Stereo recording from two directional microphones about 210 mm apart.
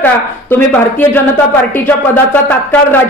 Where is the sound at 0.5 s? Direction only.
10° left (ahead or behind).